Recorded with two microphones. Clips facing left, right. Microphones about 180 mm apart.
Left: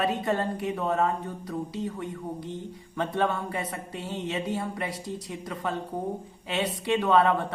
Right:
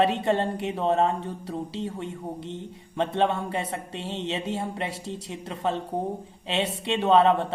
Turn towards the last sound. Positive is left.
turn(degrees=-25)  # may be behind; listen again after turning